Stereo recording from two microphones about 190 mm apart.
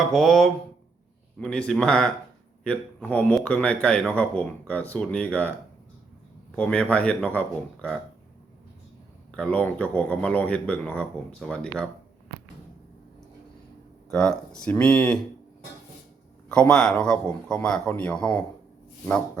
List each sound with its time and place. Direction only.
0.1 s a man's voice: centre (ahead or behind)
6.6 s speech: 5° left (ahead or behind)
9.3 s speech: 5° left (ahead or behind)
14.1 s a man's voice: 5° left (ahead or behind)
16.5 s a man's voice: 5° left (ahead or behind)